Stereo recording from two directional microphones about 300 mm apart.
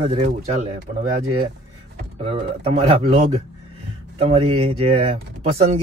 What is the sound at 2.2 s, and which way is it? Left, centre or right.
Speech, centre.